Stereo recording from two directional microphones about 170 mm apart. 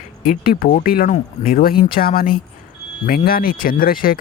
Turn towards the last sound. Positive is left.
turn(degrees=55)  # may be behind; listen again after turning